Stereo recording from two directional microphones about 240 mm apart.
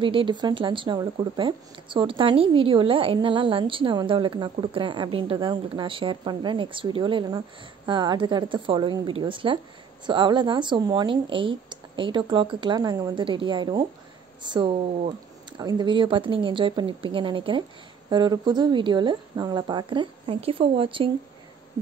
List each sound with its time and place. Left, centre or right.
0.0 s speech: right